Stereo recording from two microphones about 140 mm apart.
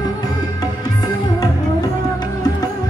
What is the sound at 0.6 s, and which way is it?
Music, 25° left (ahead or behind).